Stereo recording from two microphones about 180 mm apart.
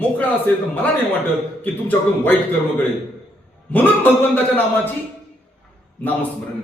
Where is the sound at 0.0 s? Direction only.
10° left (ahead or behind).